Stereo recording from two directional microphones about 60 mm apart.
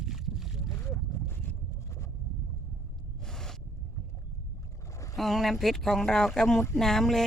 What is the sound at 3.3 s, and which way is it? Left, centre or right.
Boat, centre.